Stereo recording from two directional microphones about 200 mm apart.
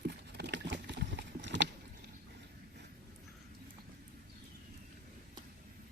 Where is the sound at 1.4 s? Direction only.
60° right (ahead or behind).